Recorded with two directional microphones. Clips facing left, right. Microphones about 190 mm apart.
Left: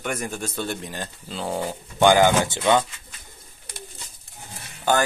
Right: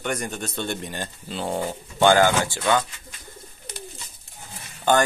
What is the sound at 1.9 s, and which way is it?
Speech, 15° left (ahead or behind).